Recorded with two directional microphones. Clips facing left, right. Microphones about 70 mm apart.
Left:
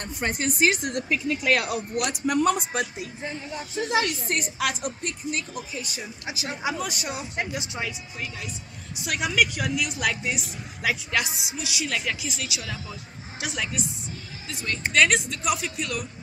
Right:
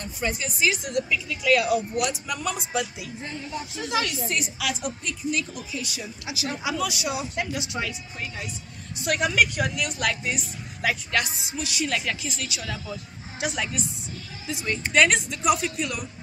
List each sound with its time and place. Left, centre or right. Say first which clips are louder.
0.0 s a woman's voice: left 2 dB; left
3.2 s speech: left 1 dB; centre
3.7 s a woman's voice: left 3 dB; left
8.9 s a woman's voice: right 2 dB; centre